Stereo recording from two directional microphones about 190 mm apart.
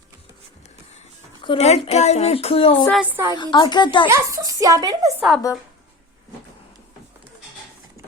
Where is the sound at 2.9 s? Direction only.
5° right (ahead or behind).